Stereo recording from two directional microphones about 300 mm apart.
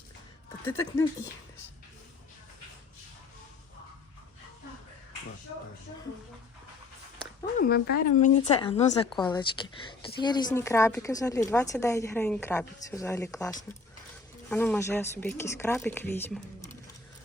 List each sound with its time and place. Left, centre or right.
0.6 s a woman's voice: centre
7.6 s a woman's voice: left; by 16.4 s centre